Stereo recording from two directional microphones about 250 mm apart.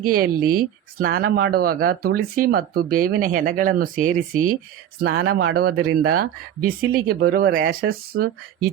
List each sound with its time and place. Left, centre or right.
0.0 s speech: right